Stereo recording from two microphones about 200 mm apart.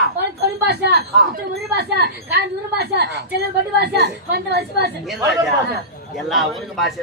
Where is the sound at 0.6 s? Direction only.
55° right (ahead or behind).